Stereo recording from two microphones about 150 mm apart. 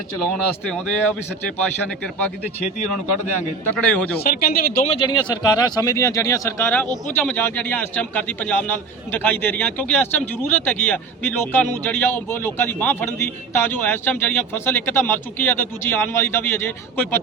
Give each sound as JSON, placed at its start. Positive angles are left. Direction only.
{"t": 0.7, "sound": "a man's voice", "side_deg": 10}
{"t": 3.8, "sound": "a man's voice", "side_deg": 10}
{"t": 4.2, "sound": "speech", "side_deg": 90}
{"t": 4.9, "sound": "a man's voice", "side_deg": 35}